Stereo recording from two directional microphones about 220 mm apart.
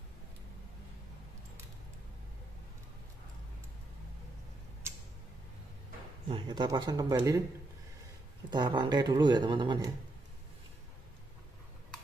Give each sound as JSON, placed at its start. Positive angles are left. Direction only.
{"t": 6.2, "sound": "speech", "side_deg": -20}
{"t": 8.5, "sound": "speech", "side_deg": -20}